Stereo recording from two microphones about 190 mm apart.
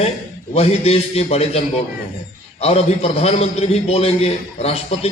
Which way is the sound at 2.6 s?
30° left (ahead or behind).